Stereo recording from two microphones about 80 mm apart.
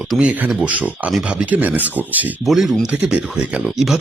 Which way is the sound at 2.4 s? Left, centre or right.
Centre.